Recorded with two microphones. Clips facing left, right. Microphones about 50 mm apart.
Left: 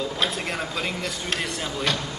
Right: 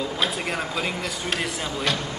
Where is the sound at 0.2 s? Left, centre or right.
Centre.